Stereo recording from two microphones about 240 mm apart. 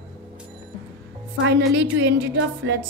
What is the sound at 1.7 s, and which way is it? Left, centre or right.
A woman's voice, right.